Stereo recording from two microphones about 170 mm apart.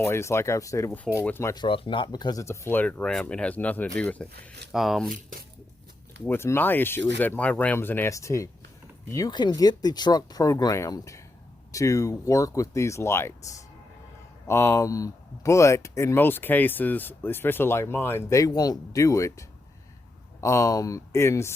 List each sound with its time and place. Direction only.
0.0 s speech: 15° left (ahead or behind)
1.6 s speech: 30° left (ahead or behind); by 5.1 s centre (ahead or behind)
6.2 s speech: 15° left (ahead or behind)
14.4 s speech: 15° left (ahead or behind)